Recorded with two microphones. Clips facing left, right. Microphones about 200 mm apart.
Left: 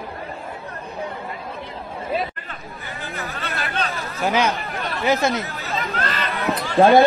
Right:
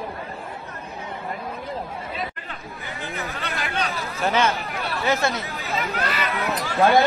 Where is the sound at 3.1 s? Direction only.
15° right (ahead or behind).